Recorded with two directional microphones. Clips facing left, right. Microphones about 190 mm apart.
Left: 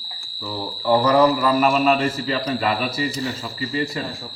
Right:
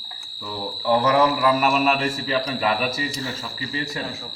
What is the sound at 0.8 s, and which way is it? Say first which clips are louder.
A man's voice: left 3 dB; 5° right (ahead or behind).